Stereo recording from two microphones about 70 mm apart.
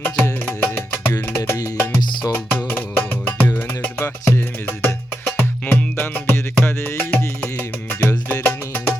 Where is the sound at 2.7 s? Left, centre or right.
Left.